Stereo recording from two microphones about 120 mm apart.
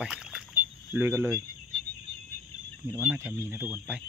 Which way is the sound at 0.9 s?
20° right (ahead or behind).